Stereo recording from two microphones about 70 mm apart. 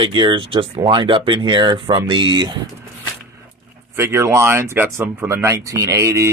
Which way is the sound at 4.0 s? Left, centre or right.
Right.